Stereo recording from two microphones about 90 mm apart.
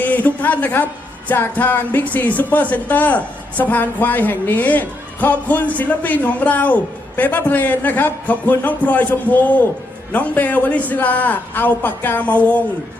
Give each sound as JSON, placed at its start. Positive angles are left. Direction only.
{"t": 0.0, "sound": "a woman's voice", "side_deg": 20}